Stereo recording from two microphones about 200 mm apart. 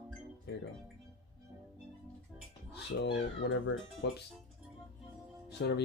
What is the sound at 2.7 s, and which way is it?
Speech, 60° left (ahead or behind).